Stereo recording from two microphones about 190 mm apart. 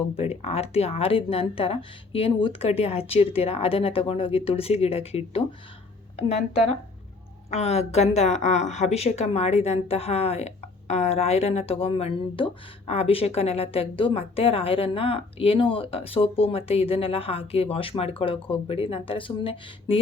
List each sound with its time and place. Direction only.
0.2 s speech: 35° left (ahead or behind)
7.5 s a woman's voice: 35° left (ahead or behind)